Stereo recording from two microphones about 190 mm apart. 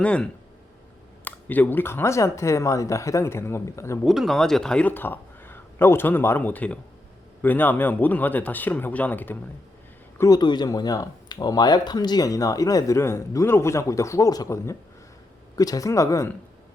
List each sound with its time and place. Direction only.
0.0 s speech: 5° left (ahead or behind)
4.0 s speech: centre (ahead or behind)